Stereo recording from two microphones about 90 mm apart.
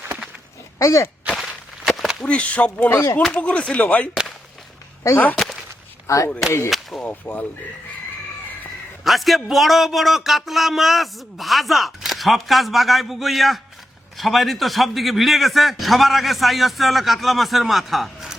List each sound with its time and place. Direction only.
0.8 s speech: 35° left (ahead or behind)
1.3 s walk: 5° right (ahead or behind)
2.2 s speech: 15° left (ahead or behind)
6.1 s speech: 35° left (ahead or behind)
7.0 s speech: 15° left (ahead or behind)
9.0 s speech: centre (ahead or behind)